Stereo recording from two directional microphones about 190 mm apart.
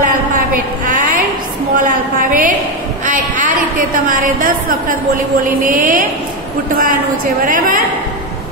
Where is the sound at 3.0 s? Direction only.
45° right (ahead or behind).